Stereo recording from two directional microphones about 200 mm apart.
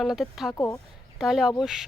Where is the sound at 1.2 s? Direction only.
Centre (ahead or behind).